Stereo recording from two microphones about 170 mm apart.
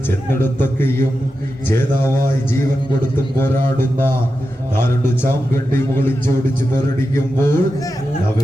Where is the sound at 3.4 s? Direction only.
15° left (ahead or behind).